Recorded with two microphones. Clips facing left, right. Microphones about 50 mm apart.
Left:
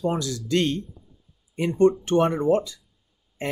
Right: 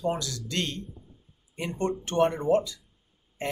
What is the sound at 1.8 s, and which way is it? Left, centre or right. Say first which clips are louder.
Speech: left 6 dB; centre.